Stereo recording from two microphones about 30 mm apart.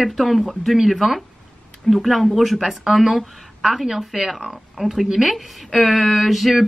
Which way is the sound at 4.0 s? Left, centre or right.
Centre.